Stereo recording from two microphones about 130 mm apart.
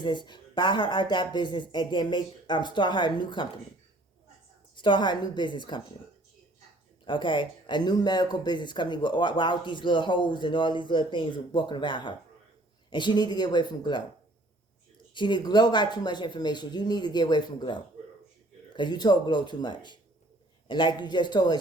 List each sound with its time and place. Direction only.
0.0 s speech: 35° left (ahead or behind)
4.7 s speech: 35° left (ahead or behind)
7.0 s speech: 40° left (ahead or behind)
15.1 s speech: 35° left (ahead or behind)